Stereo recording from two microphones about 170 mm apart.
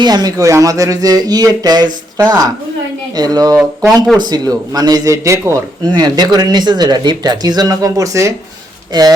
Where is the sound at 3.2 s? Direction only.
20° right (ahead or behind).